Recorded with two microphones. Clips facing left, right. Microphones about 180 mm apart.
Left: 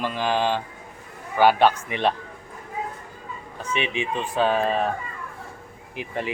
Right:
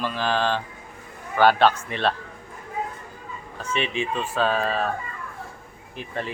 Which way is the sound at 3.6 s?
15° left (ahead or behind).